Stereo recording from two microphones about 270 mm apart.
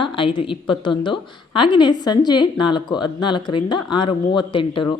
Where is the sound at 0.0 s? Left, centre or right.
Centre.